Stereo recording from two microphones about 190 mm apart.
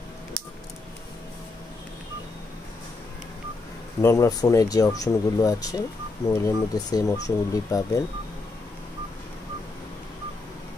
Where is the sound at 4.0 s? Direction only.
15° left (ahead or behind).